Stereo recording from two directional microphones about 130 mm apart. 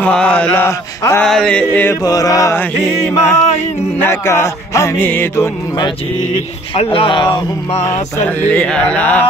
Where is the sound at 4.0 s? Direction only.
20° left (ahead or behind).